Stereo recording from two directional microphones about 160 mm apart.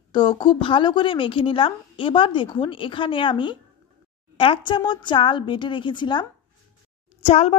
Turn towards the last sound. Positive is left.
turn(degrees=40)  # may be behind; listen again after turning